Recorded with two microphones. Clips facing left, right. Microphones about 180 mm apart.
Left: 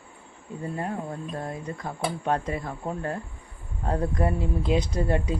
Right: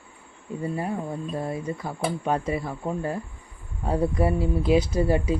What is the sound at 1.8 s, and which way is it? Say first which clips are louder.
A man's voice: left 2 dB; 5° right (ahead or behind).